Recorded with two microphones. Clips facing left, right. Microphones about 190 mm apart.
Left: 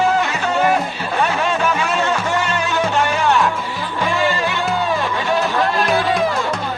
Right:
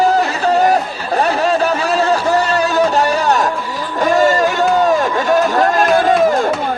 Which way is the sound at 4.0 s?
40° right (ahead or behind).